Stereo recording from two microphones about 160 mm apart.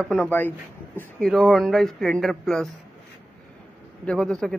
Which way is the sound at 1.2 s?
Centre (ahead or behind).